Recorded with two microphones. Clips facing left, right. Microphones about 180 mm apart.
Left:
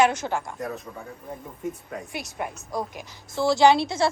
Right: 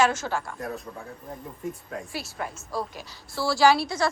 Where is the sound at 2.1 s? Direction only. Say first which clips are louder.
Left 3 dB; 20° left (ahead or behind).